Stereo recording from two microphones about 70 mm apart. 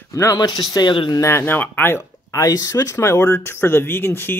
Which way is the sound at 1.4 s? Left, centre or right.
Left.